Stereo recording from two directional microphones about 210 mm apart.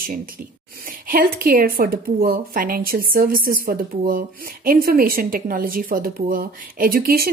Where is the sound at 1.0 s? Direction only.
45° right (ahead or behind).